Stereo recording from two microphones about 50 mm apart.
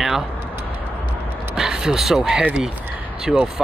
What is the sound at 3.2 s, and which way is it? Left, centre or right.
Speech, centre.